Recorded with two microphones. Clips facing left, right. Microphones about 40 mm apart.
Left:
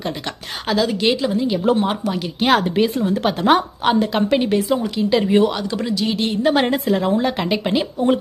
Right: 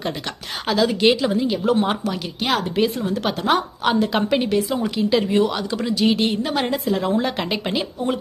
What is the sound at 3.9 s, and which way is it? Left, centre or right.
A woman's voice, centre.